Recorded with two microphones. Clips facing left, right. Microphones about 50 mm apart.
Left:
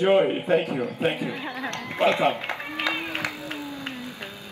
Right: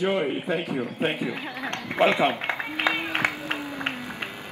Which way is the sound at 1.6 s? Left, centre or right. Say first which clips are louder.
Right 1 dB; right.